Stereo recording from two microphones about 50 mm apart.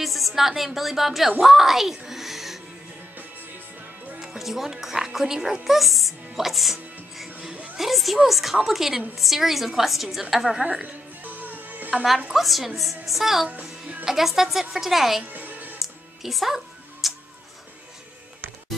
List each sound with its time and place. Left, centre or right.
0.0 s speech: centre
1.4 s music: centre
4.2 s speech: centre
10.6 s speech: right
11.2 s music: right
12.3 s speech: centre
15.2 s music: right
16.2 s music: centre